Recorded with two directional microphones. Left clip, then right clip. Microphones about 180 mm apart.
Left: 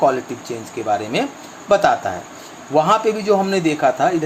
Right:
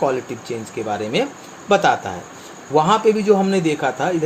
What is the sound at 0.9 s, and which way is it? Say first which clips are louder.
Speech: left 2 dB; 25° left (ahead or behind).